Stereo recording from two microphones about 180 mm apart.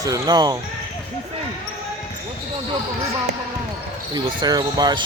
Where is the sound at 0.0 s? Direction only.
20° right (ahead or behind).